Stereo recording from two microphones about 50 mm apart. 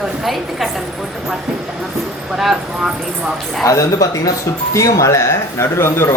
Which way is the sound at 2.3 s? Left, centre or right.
Centre.